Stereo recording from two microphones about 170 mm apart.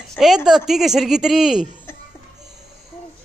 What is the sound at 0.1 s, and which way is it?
A man's voice, centre (ahead or behind).